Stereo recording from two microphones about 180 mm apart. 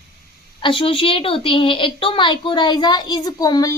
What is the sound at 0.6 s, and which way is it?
A woman's voice, 30° left (ahead or behind).